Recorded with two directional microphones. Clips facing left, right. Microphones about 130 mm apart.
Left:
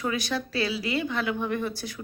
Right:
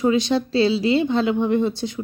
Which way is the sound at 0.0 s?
25° right (ahead or behind).